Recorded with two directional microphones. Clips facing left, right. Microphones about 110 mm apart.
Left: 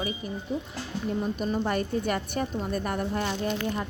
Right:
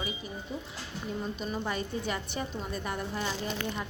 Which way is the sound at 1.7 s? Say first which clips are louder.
Left 6 dB; 55° left (ahead or behind).